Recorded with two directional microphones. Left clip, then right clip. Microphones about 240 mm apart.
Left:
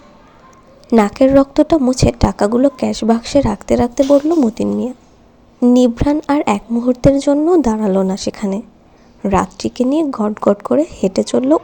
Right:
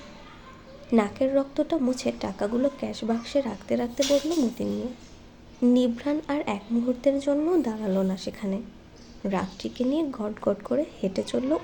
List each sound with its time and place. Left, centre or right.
0.9 s speech: left